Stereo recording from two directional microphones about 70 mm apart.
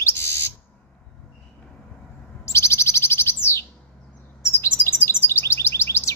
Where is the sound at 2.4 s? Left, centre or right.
Left.